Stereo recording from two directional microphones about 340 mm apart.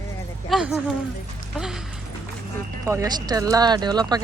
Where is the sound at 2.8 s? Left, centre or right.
Centre.